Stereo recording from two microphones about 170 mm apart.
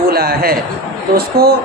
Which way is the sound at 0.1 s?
65° right (ahead or behind).